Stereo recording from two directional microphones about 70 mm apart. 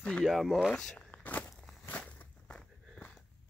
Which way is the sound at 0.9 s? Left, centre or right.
Left.